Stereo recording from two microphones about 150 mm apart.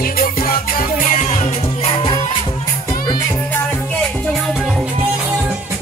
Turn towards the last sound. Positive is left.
turn(degrees=0)  # may be behind; listen again after turning